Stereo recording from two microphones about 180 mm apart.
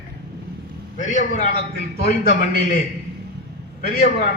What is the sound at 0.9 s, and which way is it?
Speech, 45° left (ahead or behind).